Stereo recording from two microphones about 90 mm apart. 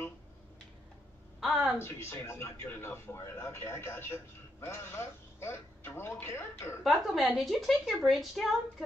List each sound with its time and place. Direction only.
1.4 s a sound: centre (ahead or behind)
1.8 s a man's voice: 30° left (ahead or behind)
6.8 s a woman's voice: centre (ahead or behind)